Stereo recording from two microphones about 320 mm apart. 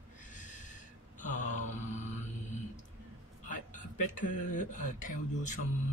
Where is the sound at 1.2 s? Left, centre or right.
Left.